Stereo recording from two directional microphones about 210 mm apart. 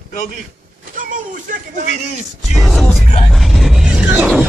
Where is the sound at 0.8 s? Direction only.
40° right (ahead or behind).